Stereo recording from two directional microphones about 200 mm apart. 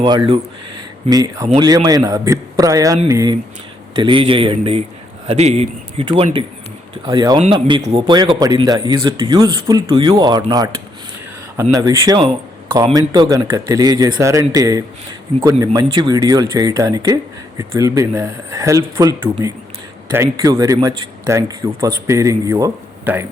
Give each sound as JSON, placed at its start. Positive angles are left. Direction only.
{"t": 1.1, "sound": "a man's voice", "side_deg": -20}